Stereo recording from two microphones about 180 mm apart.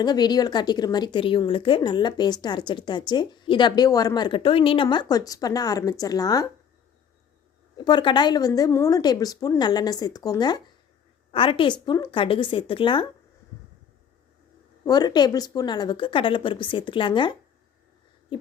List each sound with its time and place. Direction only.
0.0 s a woman's voice: 25° left (ahead or behind)
7.8 s a woman's voice: 25° left (ahead or behind)
14.8 s a woman's voice: 20° left (ahead or behind)
18.3 s a sound: 25° left (ahead or behind)